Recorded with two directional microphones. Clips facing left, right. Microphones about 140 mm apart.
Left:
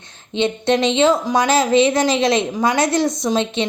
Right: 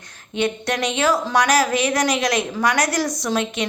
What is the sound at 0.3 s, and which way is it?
A woman's voice, 25° left (ahead or behind).